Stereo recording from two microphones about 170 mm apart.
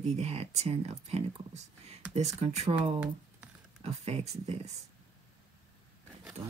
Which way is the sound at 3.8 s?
35° right (ahead or behind).